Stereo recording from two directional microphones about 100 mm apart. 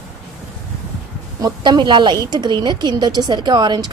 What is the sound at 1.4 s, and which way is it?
A woman's voice, 45° right (ahead or behind).